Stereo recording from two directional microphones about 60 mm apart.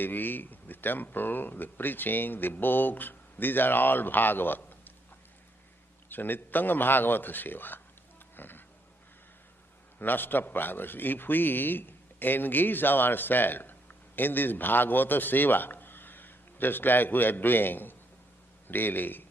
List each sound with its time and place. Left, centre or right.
0.0 s speech: left
6.1 s speech: left
8.4 s pig: left
10.0 s a man's voice: left